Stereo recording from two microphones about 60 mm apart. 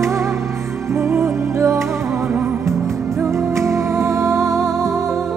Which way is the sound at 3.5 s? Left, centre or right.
Right.